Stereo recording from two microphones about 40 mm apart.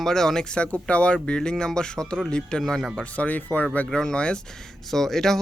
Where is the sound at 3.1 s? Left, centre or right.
Left.